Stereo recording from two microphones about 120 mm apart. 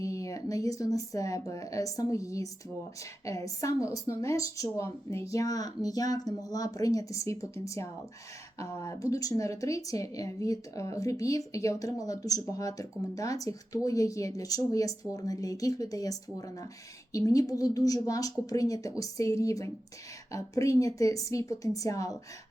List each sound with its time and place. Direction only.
0.0 s speech: 25° left (ahead or behind)